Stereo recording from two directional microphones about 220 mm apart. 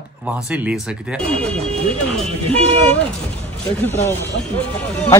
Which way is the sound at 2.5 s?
30° right (ahead or behind).